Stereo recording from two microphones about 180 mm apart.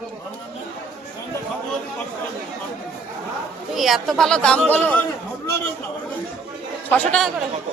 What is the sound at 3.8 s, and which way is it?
Speech, centre (ahead or behind).